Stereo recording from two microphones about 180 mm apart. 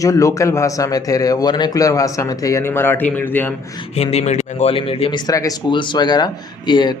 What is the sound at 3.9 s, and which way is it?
Speech, 35° left (ahead or behind).